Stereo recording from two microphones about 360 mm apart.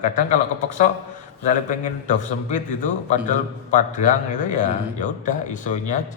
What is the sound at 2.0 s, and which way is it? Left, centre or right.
Speech, left.